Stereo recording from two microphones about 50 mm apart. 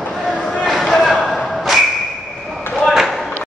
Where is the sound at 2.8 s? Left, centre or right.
Centre.